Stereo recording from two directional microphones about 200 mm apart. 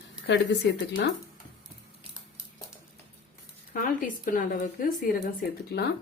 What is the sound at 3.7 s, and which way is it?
Speech, 40° left (ahead or behind).